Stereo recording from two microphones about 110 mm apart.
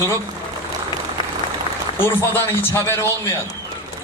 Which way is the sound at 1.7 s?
45° left (ahead or behind).